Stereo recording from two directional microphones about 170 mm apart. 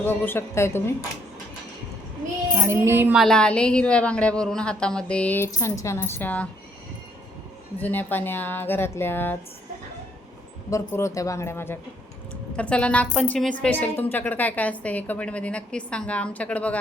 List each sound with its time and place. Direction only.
0.0 s a woman's voice: 10° left (ahead or behind)
2.6 s speech: 15° right (ahead or behind)
3.2 s a woman's voice: 5° left (ahead or behind)
7.8 s a woman's voice: 10° left (ahead or behind)
10.7 s a woman's voice: 15° left (ahead or behind)